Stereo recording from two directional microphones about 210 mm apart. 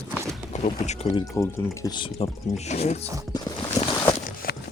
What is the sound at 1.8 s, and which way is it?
Speech, 25° left (ahead or behind).